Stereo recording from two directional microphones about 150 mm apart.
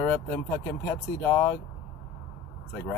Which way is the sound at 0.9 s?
15° left (ahead or behind).